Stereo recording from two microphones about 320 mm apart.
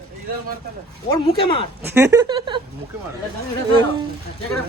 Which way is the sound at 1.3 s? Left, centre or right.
Centre.